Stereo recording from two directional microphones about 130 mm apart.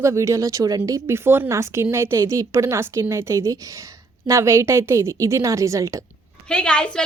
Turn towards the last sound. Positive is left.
turn(degrees=10)  # may be behind; listen again after turning